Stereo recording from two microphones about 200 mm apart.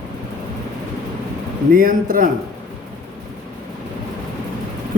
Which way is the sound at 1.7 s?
45° right (ahead or behind).